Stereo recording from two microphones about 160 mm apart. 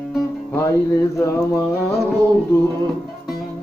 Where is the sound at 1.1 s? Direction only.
20° left (ahead or behind).